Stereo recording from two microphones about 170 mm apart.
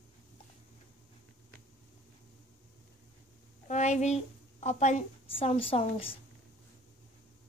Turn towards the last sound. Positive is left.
turn(degrees=35)  # may be behind; listen again after turning